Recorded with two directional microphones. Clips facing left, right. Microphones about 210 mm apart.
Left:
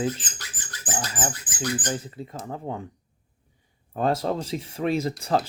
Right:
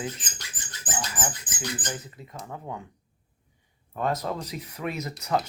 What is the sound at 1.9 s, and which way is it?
Speech, 30° left (ahead or behind).